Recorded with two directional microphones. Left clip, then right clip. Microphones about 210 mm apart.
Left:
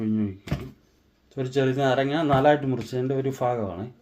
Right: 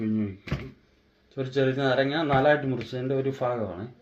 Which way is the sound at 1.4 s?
50° left (ahead or behind).